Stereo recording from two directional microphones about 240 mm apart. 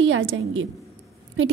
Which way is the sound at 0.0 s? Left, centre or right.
Right.